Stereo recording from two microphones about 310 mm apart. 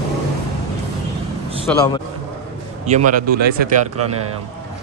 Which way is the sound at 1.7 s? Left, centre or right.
Centre.